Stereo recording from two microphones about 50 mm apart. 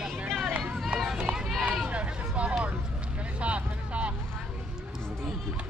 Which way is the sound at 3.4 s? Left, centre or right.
Right.